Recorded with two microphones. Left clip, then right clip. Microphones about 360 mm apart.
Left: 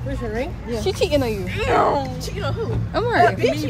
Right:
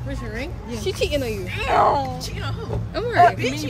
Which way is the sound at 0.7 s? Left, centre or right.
Centre.